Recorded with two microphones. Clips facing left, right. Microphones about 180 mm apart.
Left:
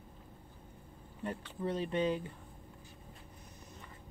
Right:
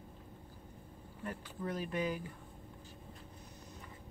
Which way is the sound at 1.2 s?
30° left (ahead or behind).